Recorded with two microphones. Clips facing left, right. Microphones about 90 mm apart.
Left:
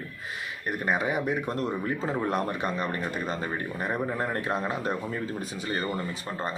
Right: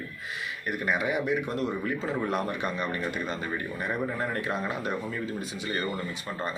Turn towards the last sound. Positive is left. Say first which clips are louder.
# left 1 dB
turn(degrees=40)  # may be behind; listen again after turning